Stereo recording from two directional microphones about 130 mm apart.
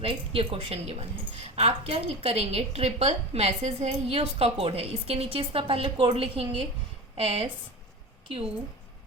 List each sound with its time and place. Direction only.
0.0 s a woman's voice: 45° right (ahead or behind)